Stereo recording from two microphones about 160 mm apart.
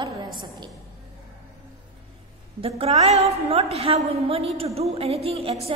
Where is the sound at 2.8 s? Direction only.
40° right (ahead or behind).